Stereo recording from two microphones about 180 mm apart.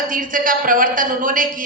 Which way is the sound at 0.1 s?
50° right (ahead or behind).